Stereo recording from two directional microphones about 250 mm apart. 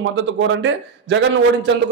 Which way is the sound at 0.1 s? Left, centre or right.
Right.